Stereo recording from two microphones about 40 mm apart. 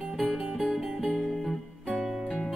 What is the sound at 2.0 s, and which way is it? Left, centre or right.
Music, centre.